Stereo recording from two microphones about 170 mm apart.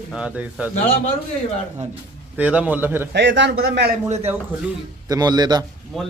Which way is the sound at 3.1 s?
90° right.